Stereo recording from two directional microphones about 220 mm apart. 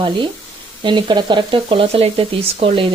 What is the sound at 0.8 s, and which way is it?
Speech, 20° right (ahead or behind).